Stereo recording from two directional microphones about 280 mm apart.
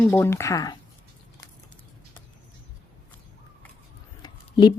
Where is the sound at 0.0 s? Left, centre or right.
Centre.